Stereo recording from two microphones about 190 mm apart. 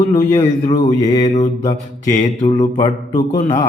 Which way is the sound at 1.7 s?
25° left (ahead or behind).